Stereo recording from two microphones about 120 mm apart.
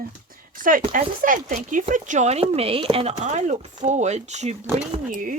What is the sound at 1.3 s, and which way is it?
Speech, 90° right.